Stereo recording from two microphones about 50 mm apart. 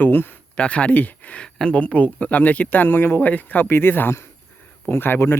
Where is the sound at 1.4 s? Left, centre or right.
Left.